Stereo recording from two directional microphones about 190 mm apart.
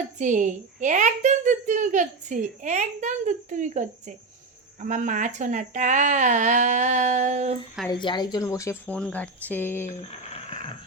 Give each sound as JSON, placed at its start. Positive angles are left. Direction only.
{"t": 0.2, "sound": "a woman's voice", "side_deg": -40}
{"t": 8.0, "sound": "speech", "side_deg": 20}
{"t": 10.1, "sound": "a sound", "side_deg": 30}